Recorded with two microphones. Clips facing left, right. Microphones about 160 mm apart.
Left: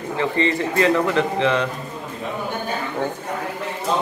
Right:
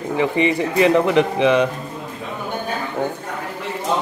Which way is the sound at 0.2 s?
15° right (ahead or behind).